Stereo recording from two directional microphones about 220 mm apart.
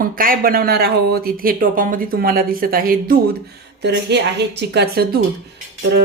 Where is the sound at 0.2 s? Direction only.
40° right (ahead or behind).